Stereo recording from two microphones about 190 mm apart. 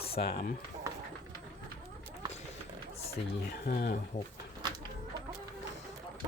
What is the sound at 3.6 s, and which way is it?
Speech, 55° left (ahead or behind).